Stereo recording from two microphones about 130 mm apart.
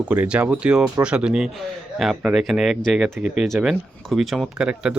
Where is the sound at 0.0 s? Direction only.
10° right (ahead or behind).